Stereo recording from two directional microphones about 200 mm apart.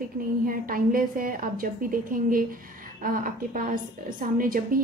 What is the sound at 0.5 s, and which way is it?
A woman's voice, 45° right (ahead or behind).